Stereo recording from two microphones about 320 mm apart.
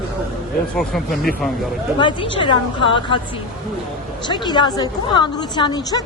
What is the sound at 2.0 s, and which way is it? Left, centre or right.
A woman's voice, centre.